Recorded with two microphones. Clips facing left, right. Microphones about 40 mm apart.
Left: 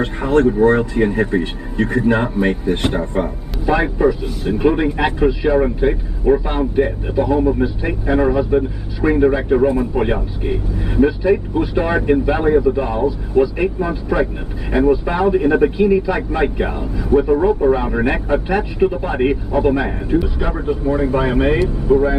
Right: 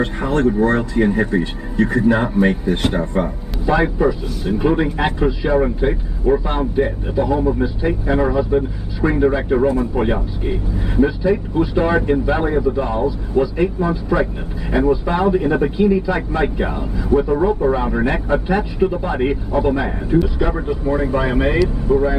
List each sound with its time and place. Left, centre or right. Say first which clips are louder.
0.0 s speech: left 2 dB; centre
20.8 s speech: left 1 dB; centre
21.1 s speech: left 2 dB; centre